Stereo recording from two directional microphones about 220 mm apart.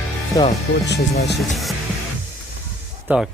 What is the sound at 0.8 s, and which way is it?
Speech, 50° left (ahead or behind).